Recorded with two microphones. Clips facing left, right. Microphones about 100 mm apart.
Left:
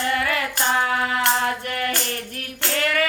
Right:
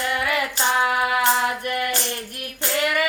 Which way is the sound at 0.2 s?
15° right (ahead or behind).